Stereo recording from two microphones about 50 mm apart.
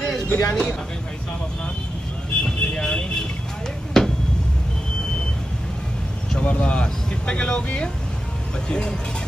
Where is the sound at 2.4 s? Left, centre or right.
Centre.